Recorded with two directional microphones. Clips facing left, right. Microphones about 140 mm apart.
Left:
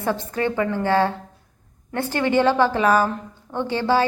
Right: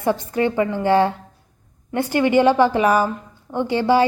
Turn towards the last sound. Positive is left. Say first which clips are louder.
# right 3 dB
turn(degrees=-15)  # may be behind; listen again after turning